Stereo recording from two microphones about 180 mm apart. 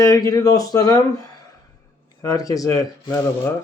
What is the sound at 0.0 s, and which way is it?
Speech, 20° left (ahead or behind).